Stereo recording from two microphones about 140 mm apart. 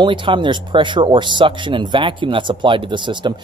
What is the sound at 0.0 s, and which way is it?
Speech, 35° right (ahead or behind).